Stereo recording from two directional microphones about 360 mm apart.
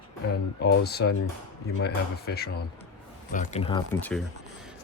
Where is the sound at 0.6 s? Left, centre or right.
Left.